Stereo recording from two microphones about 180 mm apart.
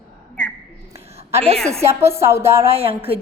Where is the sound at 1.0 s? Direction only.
35° right (ahead or behind).